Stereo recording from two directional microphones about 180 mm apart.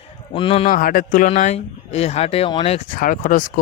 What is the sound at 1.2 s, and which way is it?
Speech, 40° left (ahead or behind).